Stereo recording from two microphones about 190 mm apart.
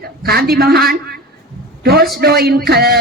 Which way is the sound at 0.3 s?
55° right (ahead or behind).